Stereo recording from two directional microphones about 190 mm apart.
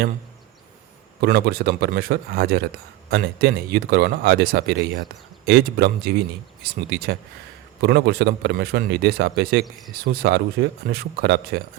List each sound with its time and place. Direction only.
1.2 s speech: 55° right (ahead or behind)